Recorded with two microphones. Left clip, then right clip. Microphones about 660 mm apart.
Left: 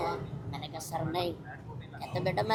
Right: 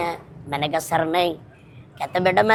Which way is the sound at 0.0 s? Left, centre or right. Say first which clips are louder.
Right 7 dB; right.